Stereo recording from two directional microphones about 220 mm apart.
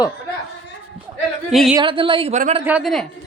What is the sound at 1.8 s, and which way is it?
Speech, 20° right (ahead or behind).